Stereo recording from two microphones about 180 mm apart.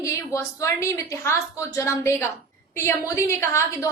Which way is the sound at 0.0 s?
15° left (ahead or behind).